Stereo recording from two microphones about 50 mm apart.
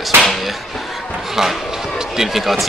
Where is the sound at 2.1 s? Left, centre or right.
Centre.